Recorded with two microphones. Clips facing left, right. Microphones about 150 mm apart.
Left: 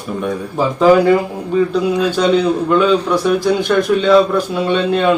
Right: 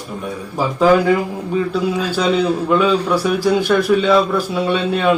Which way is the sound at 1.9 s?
5° right (ahead or behind).